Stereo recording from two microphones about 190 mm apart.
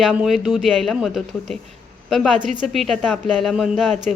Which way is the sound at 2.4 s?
40° right (ahead or behind).